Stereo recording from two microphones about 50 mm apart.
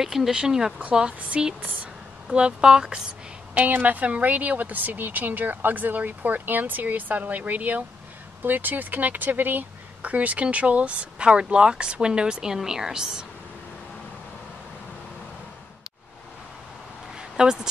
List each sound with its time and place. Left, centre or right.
0.0 s speech: centre
3.5 s speech: right; by 13.2 s centre
17.2 s a sound: centre